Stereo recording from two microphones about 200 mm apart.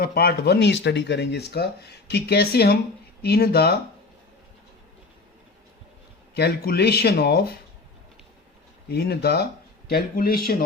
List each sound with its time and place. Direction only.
0.0 s speech: 50° left (ahead or behind)
6.3 s speech: 55° left (ahead or behind)
8.9 s speech: 55° left (ahead or behind)